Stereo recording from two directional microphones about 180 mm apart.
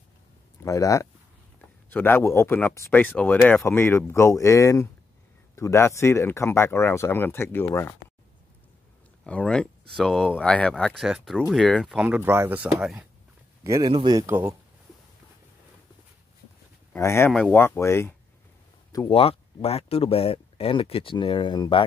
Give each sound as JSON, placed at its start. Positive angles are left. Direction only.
{"t": 0.7, "sound": "speech", "side_deg": 20}
{"t": 9.2, "sound": "speech", "side_deg": 5}
{"t": 13.7, "sound": "a man's voice", "side_deg": -25}
{"t": 16.9, "sound": "speech", "side_deg": 15}
{"t": 18.9, "sound": "speech", "side_deg": 25}